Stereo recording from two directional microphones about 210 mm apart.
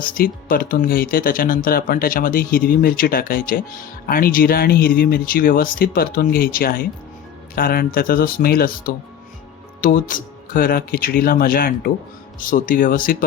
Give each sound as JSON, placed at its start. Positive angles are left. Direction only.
{"t": 0.0, "sound": "speech", "side_deg": 45}